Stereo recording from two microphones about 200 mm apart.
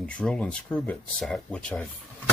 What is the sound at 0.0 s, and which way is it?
Speech, 5° left (ahead or behind).